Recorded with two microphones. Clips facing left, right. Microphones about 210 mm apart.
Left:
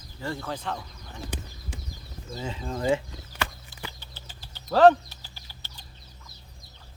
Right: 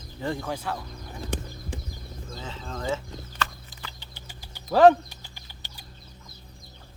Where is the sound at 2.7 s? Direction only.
15° left (ahead or behind).